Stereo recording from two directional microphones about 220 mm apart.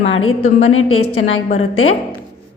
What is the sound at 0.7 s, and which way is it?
A woman's voice, 70° left (ahead or behind).